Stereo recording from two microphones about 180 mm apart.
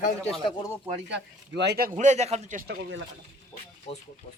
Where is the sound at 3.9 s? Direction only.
35° left (ahead or behind).